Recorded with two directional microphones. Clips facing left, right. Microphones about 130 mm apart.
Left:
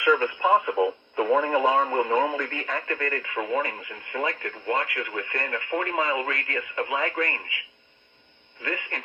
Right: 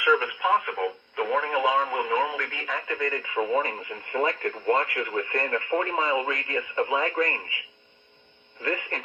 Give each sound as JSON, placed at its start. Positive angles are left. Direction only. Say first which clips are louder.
{"t": 0.1, "sound": "speech", "louder": "left 2 dB", "side_deg": 0}
{"t": 3.0, "sound": "speech", "louder": "right 2 dB", "side_deg": -15}
{"t": 4.4, "sound": "speech", "louder": "right 3 dB", "side_deg": -45}
{"t": 4.9, "sound": "speech", "louder": "right 3 dB", "side_deg": -25}